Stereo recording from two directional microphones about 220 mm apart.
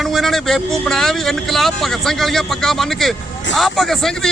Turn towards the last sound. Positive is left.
turn(degrees=0)  # may be behind; listen again after turning